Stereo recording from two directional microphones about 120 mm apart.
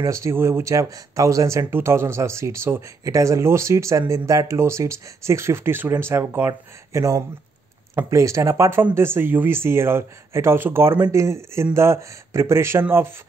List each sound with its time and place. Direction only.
0.0 s speech: 25° right (ahead or behind)